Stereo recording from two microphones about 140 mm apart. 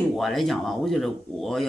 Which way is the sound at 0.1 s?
Centre (ahead or behind).